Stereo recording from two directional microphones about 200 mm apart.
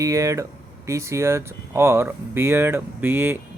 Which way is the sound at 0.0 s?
15° right (ahead or behind).